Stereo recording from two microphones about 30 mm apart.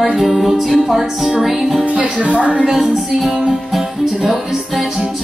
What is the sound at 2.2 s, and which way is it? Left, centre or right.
Speech, right.